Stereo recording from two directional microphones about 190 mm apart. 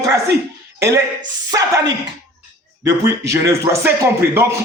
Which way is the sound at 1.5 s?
20° right (ahead or behind).